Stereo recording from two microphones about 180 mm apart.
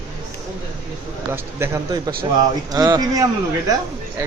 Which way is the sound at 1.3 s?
15° right (ahead or behind).